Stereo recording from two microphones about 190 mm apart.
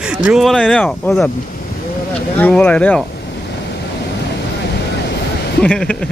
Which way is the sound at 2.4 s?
10° left (ahead or behind).